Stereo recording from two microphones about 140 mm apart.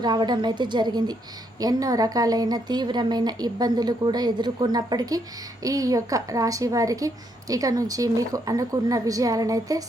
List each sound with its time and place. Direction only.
0.0 s a woman's voice: 30° right (ahead or behind)